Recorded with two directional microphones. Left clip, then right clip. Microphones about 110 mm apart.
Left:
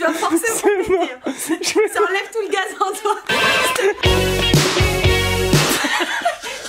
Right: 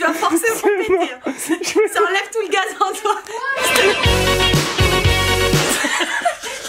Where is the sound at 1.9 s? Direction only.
5° right (ahead or behind).